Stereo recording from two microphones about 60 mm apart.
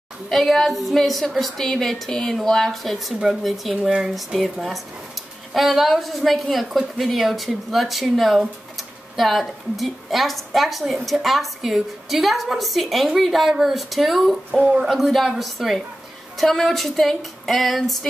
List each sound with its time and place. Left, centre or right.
0.3 s a woman's voice: centre